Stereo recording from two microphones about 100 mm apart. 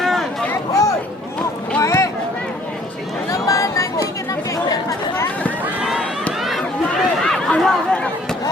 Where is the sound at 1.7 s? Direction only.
30° left (ahead or behind).